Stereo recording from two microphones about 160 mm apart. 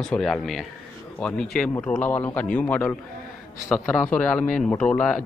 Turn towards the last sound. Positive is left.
turn(degrees=5)  # may be behind; listen again after turning